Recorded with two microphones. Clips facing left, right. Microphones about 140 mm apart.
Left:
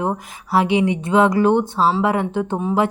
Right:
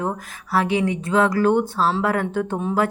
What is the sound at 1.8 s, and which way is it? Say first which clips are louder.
Speech: left 3 dB; 10° left (ahead or behind).